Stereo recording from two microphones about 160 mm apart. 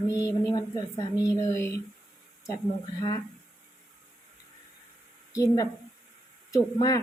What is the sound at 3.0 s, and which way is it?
Speech, 25° left (ahead or behind).